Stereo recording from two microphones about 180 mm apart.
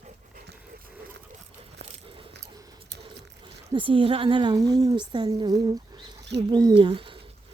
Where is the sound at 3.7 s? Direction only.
30° right (ahead or behind).